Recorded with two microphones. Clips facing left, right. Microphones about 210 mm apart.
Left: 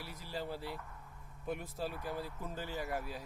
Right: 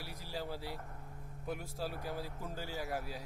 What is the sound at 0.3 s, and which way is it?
Speech, 10° right (ahead or behind).